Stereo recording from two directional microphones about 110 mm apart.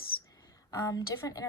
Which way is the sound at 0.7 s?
35° left (ahead or behind).